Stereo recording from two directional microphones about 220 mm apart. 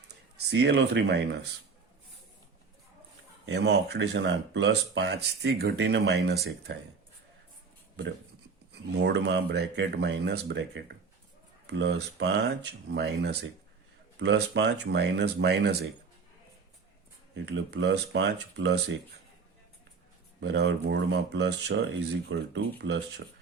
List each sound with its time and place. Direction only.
0.1 s speech: 50° right (ahead or behind)
3.4 s speech: 50° right (ahead or behind)
8.9 s speech: 50° right (ahead or behind)
17.3 s speech: 55° right (ahead or behind)
20.4 s speech: 50° right (ahead or behind)